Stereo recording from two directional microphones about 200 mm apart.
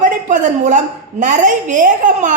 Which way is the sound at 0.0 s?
40° right (ahead or behind).